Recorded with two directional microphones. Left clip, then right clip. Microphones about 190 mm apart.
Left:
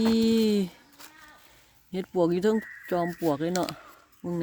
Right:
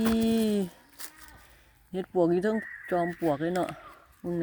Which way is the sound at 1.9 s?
25° left (ahead or behind).